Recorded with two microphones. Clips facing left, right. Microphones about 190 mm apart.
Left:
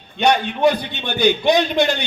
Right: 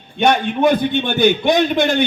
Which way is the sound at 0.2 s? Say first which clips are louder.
Right 1 dB; 50° right (ahead or behind).